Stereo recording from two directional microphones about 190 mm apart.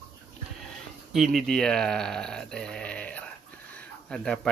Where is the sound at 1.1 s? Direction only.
Centre (ahead or behind).